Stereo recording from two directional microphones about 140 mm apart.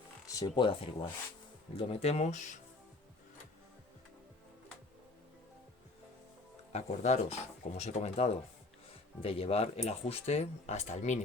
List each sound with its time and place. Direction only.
0.3 s speech: 30° left (ahead or behind); by 2.6 s 55° left (ahead or behind)
6.7 s speech: 50° left (ahead or behind)